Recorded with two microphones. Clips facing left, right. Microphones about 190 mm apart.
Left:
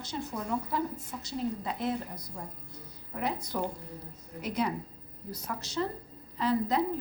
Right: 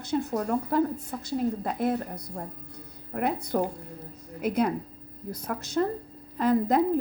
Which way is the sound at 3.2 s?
55° right (ahead or behind).